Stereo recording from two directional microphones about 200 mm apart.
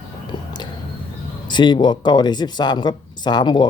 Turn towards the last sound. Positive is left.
turn(degrees=20)  # may be behind; listen again after turning